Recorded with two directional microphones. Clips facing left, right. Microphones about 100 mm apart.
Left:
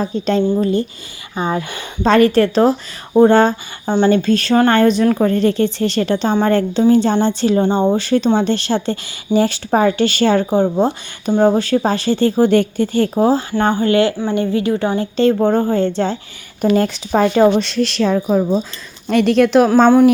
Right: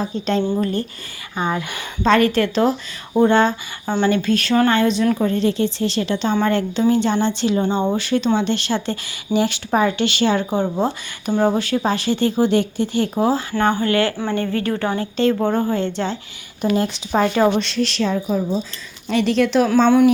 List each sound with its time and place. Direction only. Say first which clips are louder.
0.6 s speech: left 5 dB; 20° left (ahead or behind); by 3.5 s 40° left (ahead or behind)
3.8 s speech: left 4 dB; 20° left (ahead or behind)
4.1 s speech: left 4 dB; 35° left (ahead or behind)
4.7 s a woman's voice: left 4 dB; 50° left (ahead or behind)
7.6 s speech: left 5 dB; 30° left (ahead or behind)
10.5 s speech: left 5 dB; 30° left (ahead or behind)
11.4 s speech: left 5 dB; 35° left (ahead or behind)
12.5 s a woman's voice: left 4 dB; 50° left (ahead or behind)
13.1 s a woman's voice: left 4 dB; 25° left (ahead or behind)
15.1 s speech: left 5 dB; 30° left (ahead or behind)
16.7 s speech: left 4 dB; 60° left (ahead or behind)
17.1 s a woman's voice: left 4 dB; 40° left (ahead or behind)